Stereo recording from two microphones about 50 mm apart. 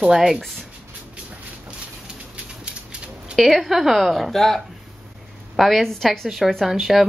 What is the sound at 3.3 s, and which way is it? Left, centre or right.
A woman's voice, centre.